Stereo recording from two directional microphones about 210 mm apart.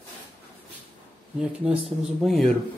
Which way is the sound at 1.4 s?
5° right (ahead or behind).